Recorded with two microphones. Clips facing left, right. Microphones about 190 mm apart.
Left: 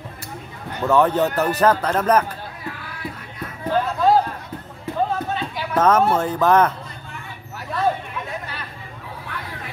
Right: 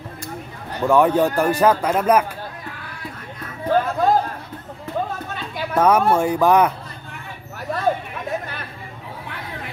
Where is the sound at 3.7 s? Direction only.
55° right (ahead or behind).